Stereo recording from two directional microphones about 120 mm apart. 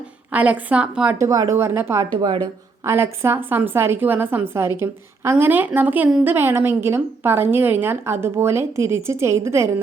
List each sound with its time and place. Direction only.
0.3 s a woman's voice: 15° right (ahead or behind)
1.2 s a woman's voice: 25° right (ahead or behind)
2.2 s a woman's voice: 35° right (ahead or behind)
2.8 s a woman's voice: 20° right (ahead or behind)